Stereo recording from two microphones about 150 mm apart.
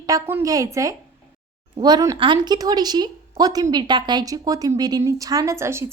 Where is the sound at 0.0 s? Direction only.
20° right (ahead or behind).